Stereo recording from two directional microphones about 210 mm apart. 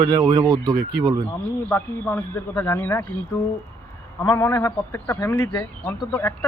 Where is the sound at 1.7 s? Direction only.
10° left (ahead or behind).